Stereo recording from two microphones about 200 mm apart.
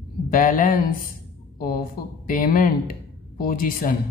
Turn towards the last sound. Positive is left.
turn(degrees=45)  # may be behind; listen again after turning